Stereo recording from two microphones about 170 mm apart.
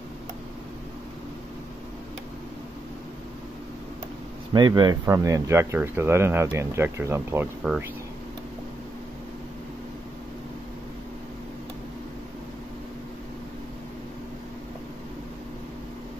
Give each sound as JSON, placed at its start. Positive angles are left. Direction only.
{"t": 4.6, "sound": "speech", "side_deg": -25}
{"t": 7.6, "sound": "speech", "side_deg": 0}